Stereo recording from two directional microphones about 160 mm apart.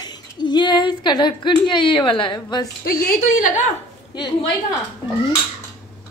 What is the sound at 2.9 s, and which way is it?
Speech, 70° left (ahead or behind).